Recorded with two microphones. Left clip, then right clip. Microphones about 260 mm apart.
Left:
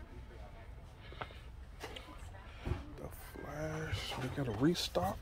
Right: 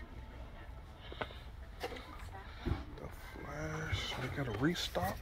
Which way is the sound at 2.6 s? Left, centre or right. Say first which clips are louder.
Right 1 dB; centre.